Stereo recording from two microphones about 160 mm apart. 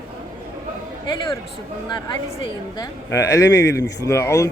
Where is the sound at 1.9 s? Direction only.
30° left (ahead or behind).